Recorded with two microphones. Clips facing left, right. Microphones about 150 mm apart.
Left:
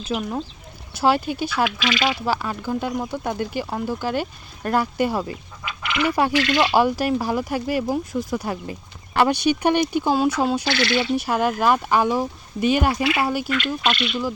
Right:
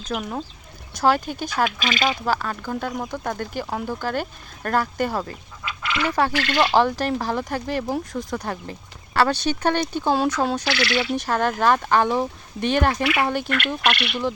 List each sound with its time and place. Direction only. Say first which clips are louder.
0.0 s speech: left 2 dB; 5° left (ahead or behind)
1.3 s speech: left 1 dB; 45° right (ahead or behind)
2.1 s speech: even; 10° left (ahead or behind)
10.7 s speech: left 2 dB; 25° left (ahead or behind)
11.2 s speech: left 1 dB; 10° left (ahead or behind)
13.9 s speech: left 2 dB; 65° right (ahead or behind)